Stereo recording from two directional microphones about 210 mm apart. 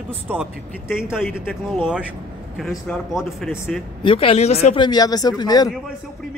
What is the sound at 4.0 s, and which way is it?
Speech, 25° left (ahead or behind).